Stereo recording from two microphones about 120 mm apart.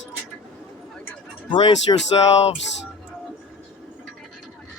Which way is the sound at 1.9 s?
35° left (ahead or behind).